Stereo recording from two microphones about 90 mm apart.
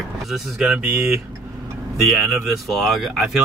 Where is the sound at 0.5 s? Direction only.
10° right (ahead or behind).